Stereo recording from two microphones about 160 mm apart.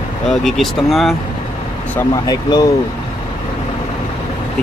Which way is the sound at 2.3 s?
25° left (ahead or behind).